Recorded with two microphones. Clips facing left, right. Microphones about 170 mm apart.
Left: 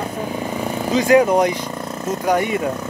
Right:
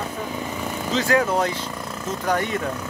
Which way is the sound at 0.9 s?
15° left (ahead or behind).